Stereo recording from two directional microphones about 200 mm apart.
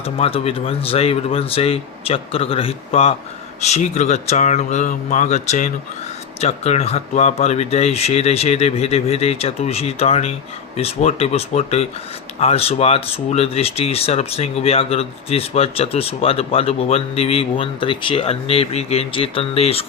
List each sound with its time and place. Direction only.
0.0 s speech: 30° left (ahead or behind)